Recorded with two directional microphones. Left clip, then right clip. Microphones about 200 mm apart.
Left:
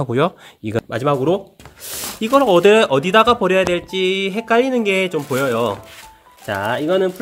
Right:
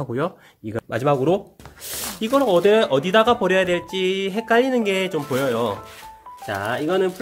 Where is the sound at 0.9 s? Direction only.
10° left (ahead or behind).